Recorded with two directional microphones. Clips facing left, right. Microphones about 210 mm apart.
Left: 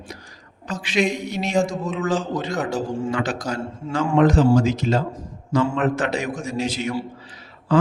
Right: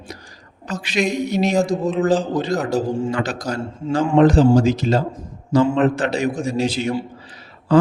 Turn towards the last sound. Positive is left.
turn(degrees=-40)  # may be behind; listen again after turning